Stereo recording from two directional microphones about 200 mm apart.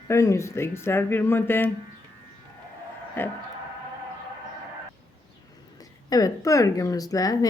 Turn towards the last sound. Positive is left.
turn(degrees=15)  # may be behind; listen again after turning